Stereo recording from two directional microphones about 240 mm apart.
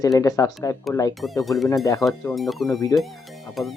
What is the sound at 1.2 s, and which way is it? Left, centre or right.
Speech, centre.